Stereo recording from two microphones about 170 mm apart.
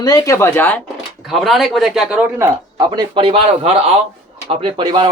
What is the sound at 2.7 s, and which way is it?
Speech, 25° right (ahead or behind).